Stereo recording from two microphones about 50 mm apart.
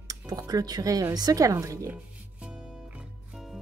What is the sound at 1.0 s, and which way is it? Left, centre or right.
Speech, right.